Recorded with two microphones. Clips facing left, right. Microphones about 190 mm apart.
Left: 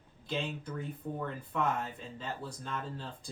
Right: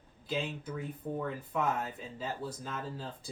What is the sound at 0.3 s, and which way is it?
Speech, 5° right (ahead or behind).